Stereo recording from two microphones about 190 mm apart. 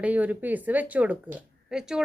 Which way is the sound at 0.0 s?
10° right (ahead or behind).